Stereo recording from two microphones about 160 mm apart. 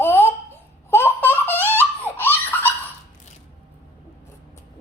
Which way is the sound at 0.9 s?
15° left (ahead or behind).